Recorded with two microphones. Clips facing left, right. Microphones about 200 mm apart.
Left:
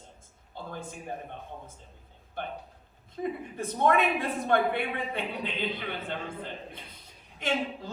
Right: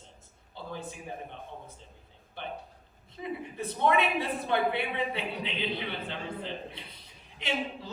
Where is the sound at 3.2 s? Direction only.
45° left (ahead or behind).